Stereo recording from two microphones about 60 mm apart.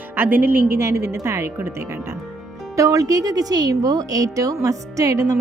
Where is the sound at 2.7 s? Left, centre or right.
Right.